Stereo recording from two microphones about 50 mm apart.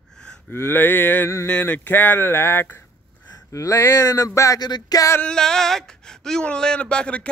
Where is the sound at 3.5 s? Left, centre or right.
Left.